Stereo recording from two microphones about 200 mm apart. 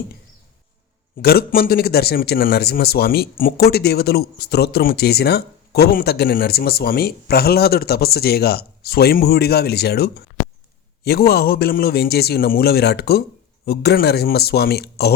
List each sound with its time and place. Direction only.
1.2 s speech: 50° left (ahead or behind)